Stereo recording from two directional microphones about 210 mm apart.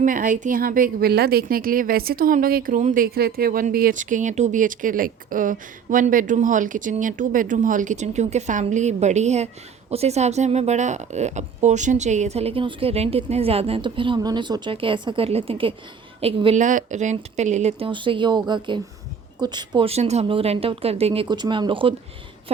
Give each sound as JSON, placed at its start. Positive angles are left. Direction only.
{"t": 0.0, "sound": "a woman's voice", "side_deg": -40}